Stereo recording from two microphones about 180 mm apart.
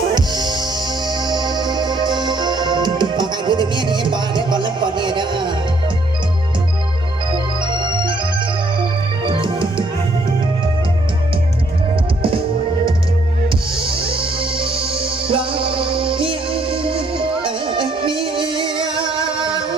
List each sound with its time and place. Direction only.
0.1 s music: 25° right (ahead or behind)
9.2 s music: 30° right (ahead or behind)
12.2 s music: 30° right (ahead or behind)